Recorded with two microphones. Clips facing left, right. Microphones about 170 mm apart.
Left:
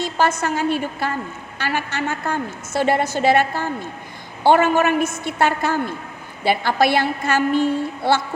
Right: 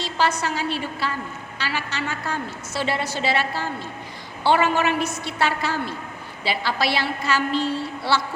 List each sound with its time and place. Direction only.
0.0 s a woman's voice: 50° left (ahead or behind)